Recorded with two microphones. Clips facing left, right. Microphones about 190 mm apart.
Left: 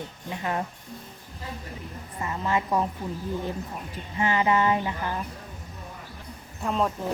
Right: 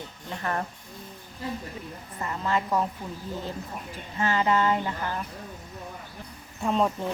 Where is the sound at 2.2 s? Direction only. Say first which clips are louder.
Left 1 dB; 15° left (ahead or behind).